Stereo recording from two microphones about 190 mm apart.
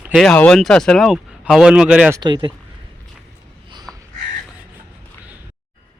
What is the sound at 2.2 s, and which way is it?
Speech, 25° right (ahead or behind).